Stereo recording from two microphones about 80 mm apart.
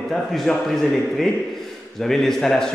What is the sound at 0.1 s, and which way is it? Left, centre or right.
A man's voice, centre.